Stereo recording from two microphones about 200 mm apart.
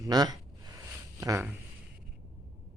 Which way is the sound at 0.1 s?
20° right (ahead or behind).